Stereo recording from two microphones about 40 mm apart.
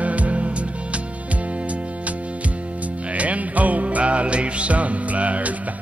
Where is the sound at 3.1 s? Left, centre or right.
Right.